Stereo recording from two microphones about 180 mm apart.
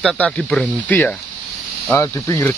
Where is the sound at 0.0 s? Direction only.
5° left (ahead or behind).